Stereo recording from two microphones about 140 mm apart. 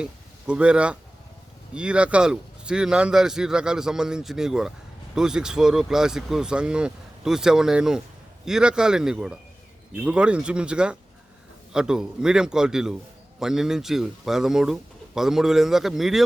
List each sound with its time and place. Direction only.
0.0 s speech: 10° right (ahead or behind)